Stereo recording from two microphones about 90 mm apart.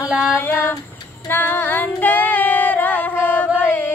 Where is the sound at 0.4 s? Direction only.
25° left (ahead or behind).